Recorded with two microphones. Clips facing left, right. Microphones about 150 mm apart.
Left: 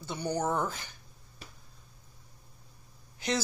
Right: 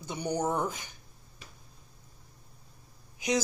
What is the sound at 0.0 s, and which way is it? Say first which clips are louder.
Speech: right 1 dB; 15° right (ahead or behind).